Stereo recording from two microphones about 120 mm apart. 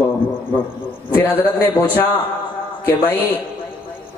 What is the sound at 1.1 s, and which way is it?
Speech, 15° left (ahead or behind).